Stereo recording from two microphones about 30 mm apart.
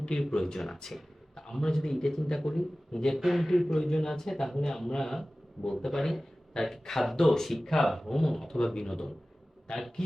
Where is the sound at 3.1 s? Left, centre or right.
Centre.